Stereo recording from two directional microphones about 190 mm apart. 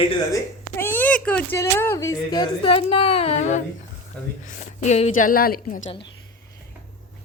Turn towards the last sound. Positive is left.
turn(degrees=45)  # may be behind; listen again after turning